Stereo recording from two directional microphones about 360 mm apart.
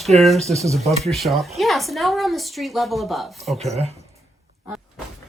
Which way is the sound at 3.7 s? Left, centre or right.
Centre.